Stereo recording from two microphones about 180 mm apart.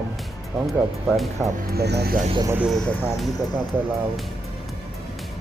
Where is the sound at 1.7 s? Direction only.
65° right (ahead or behind).